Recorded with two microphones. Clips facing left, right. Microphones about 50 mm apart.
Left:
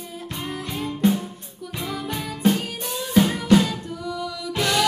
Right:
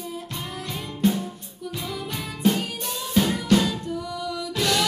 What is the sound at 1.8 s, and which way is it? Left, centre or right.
Music, left.